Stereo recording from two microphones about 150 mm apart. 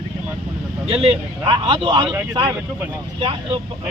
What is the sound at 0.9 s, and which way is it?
Speech, 35° right (ahead or behind).